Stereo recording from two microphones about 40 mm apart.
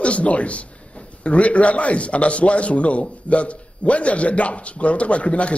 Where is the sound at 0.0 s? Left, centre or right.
Left.